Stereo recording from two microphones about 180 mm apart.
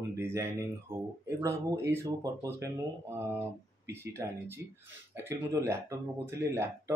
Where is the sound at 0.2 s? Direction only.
15° right (ahead or behind).